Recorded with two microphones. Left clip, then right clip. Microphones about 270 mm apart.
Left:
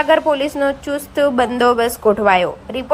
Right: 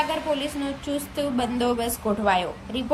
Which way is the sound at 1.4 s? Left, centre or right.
Centre.